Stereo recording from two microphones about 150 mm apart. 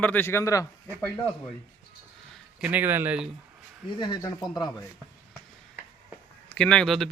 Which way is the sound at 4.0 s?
30° left (ahead or behind).